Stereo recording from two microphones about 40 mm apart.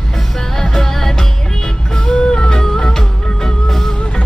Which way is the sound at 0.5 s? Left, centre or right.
Centre.